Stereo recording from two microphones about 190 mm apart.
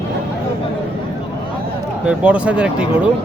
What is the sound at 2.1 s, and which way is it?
Speech, 5° right (ahead or behind).